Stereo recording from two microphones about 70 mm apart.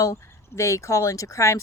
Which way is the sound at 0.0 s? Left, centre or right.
Left.